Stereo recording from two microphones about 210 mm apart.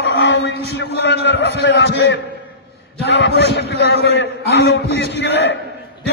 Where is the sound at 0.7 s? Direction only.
55° left (ahead or behind).